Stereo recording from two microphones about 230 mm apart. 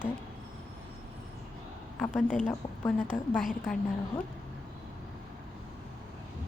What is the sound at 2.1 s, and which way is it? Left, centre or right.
Speech, left.